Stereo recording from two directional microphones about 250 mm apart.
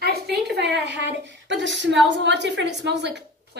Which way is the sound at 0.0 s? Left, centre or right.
Right.